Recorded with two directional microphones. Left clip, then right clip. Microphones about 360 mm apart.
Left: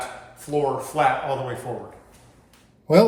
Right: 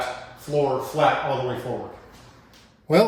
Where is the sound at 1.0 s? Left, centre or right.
Left.